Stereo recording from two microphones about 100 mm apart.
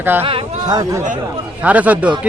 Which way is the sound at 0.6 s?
40° right (ahead or behind).